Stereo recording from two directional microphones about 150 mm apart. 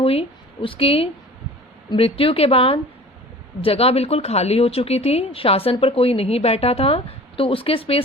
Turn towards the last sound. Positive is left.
turn(degrees=40)  # may be behind; listen again after turning